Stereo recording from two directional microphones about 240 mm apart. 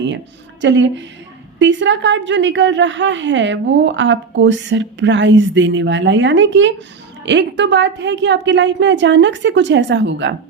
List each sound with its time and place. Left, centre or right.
0.6 s a woman's voice: right